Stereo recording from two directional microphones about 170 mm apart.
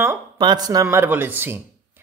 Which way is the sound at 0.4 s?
25° right (ahead or behind).